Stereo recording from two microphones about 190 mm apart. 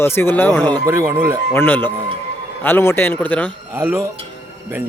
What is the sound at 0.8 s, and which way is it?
Speech, 15° right (ahead or behind).